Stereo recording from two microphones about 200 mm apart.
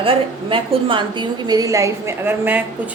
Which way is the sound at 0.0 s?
25° right (ahead or behind).